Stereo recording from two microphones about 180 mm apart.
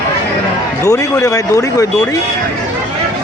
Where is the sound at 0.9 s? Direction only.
20° left (ahead or behind).